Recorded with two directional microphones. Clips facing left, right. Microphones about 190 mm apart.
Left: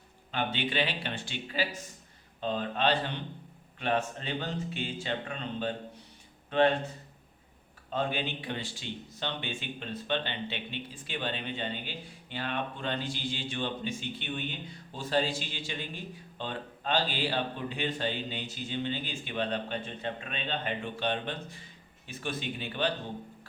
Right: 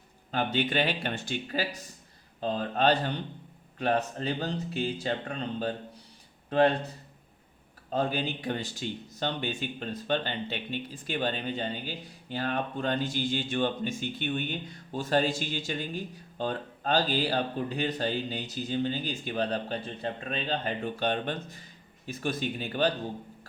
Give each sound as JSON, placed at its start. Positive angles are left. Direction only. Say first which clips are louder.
{"t": 0.3, "sound": "speech", "louder": "right 4 dB", "side_deg": -40}
{"t": 7.9, "sound": "speech", "louder": "right 3 dB", "side_deg": -40}